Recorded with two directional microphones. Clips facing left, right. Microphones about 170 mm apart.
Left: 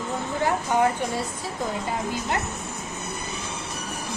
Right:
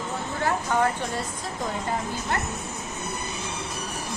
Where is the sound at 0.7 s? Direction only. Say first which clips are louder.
Left 3 dB; 15° left (ahead or behind).